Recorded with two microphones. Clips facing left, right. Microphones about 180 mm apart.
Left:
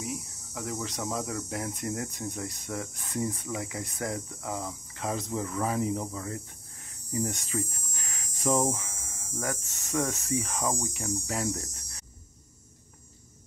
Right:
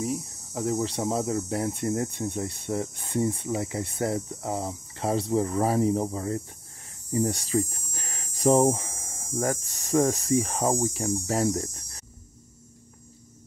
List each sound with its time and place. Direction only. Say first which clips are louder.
0.0 s speech: right 7 dB; 35° right (ahead or behind)
7.1 s hum: right 6 dB; 35° right (ahead or behind)
8.7 s cricket: right 4 dB; 30° right (ahead or behind)
9.3 s speech: right 7 dB; 45° right (ahead or behind)
11.5 s cricket: right 8 dB; 35° right (ahead or behind)